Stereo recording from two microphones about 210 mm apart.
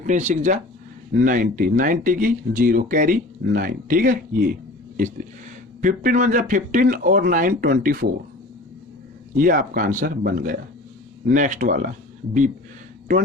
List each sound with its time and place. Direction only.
0.0 s speech: 35° right (ahead or behind)
5.8 s speech: 40° right (ahead or behind)
9.4 s speech: 40° right (ahead or behind)